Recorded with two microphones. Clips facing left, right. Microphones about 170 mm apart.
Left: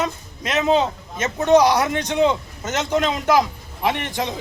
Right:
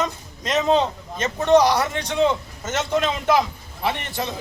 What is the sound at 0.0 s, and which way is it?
Speech, 5° left (ahead or behind).